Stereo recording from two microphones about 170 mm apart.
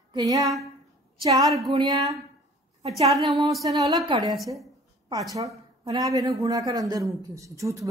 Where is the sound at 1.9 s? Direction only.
25° right (ahead or behind).